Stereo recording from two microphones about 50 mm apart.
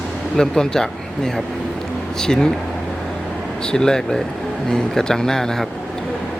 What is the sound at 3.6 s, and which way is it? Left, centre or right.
Speech, centre.